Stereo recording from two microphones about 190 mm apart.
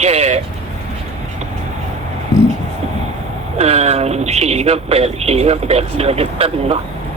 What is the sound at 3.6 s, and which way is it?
Speech, 35° right (ahead or behind).